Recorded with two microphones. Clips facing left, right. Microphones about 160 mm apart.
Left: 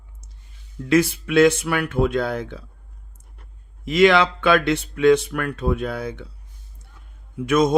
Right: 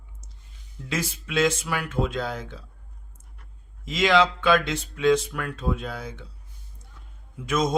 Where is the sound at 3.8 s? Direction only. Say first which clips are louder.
Left 5 dB; 60° left (ahead or behind).